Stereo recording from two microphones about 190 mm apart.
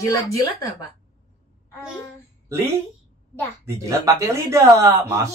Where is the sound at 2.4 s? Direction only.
15° right (ahead or behind).